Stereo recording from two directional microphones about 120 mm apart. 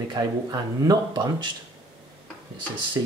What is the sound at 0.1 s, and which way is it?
Speech, 35° right (ahead or behind).